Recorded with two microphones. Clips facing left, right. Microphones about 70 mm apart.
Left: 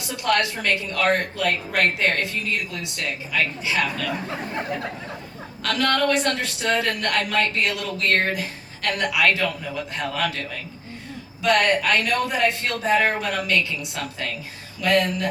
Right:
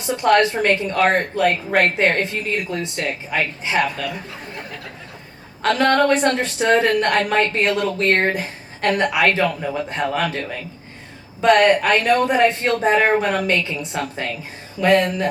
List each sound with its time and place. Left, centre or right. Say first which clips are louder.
0.0 s a woman's voice: right 7 dB; right
5.6 s a woman's voice: right 6 dB; right